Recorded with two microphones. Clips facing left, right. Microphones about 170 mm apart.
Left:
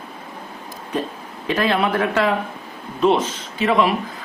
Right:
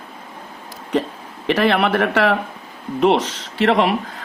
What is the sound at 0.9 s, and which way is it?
Speech, 90° right.